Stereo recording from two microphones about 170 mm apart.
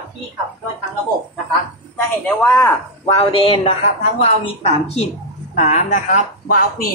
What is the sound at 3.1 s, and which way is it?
Speech, 30° left (ahead or behind).